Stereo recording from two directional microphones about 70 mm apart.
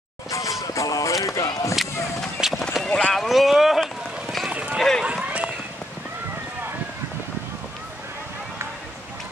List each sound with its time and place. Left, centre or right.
0.3 s a sound: left
2.4 s run: centre
2.8 s speech: centre
3.2 s run: centre
4.5 s run: centre
4.7 s speech: centre
5.0 s run: centre